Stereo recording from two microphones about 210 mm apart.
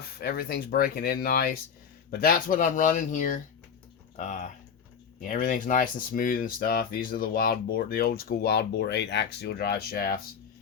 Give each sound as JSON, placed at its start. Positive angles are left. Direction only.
{"t": 0.0, "sound": "speech", "side_deg": 45}